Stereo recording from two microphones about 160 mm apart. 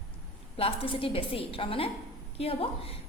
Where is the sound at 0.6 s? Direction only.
35° left (ahead or behind).